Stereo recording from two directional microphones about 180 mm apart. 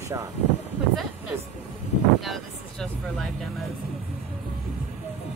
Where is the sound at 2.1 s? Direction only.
Centre (ahead or behind).